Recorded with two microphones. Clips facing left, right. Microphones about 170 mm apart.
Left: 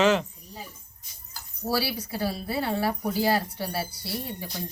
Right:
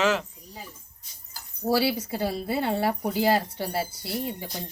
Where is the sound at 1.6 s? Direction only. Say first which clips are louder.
Right 4 dB; 20° right (ahead or behind).